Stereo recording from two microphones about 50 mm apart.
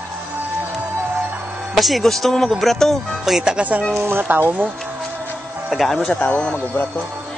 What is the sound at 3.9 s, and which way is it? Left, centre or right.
Speech, right.